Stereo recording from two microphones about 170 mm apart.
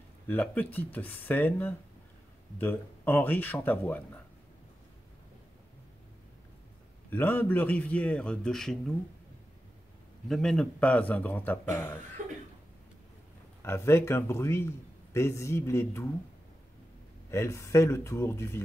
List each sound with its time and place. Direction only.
0.3 s a man's voice: 10° left (ahead or behind)
7.1 s a man's voice: 10° left (ahead or behind)
10.2 s a man's voice: centre (ahead or behind)
12.2 s cough: 45° right (ahead or behind)
13.6 s a man's voice: 15° left (ahead or behind)
17.3 s a man's voice: 15° left (ahead or behind)